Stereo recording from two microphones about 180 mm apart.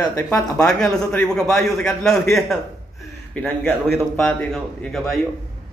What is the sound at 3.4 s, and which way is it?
A man's voice, 10° left (ahead or behind).